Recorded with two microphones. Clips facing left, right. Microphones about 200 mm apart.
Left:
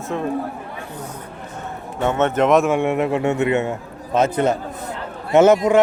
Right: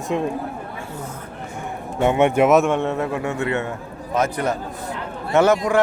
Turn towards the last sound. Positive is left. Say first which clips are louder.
# left 4 dB
turn(degrees=20)  # may be behind; listen again after turning